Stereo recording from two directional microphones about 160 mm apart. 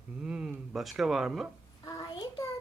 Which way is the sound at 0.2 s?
5° right (ahead or behind).